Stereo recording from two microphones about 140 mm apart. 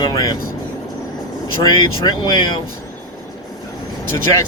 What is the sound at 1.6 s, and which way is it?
Speech, 30° left (ahead or behind).